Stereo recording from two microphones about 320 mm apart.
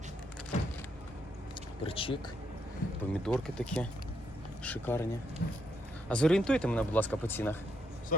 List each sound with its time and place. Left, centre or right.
1.8 s speech: centre
3.1 s speech: centre
5.4 s speech: left
6.1 s speech: centre